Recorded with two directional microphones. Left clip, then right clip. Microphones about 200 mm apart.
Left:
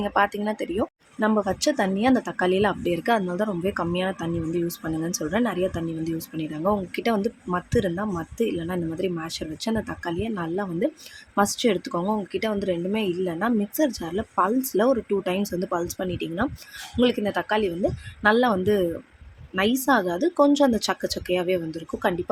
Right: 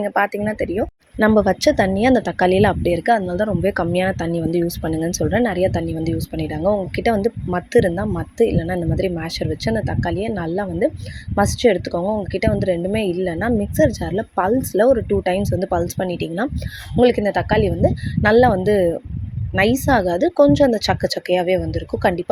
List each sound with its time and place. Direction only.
0.1 s speech: 15° right (ahead or behind)
1.2 s a woman's voice: 25° right (ahead or behind)